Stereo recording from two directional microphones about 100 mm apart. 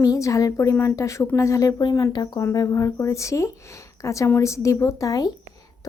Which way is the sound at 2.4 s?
30° left (ahead or behind).